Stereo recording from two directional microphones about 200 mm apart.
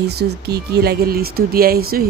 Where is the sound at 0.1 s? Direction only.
55° right (ahead or behind).